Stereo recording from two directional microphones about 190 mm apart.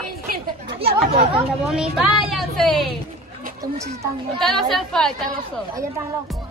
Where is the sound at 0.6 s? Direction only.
30° right (ahead or behind).